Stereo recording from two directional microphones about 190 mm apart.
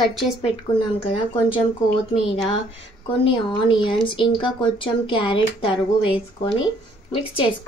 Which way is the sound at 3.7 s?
25° left (ahead or behind).